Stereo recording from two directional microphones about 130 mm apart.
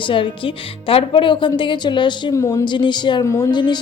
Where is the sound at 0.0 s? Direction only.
40° left (ahead or behind).